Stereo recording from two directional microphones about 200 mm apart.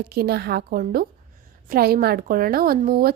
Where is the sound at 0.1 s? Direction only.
50° right (ahead or behind).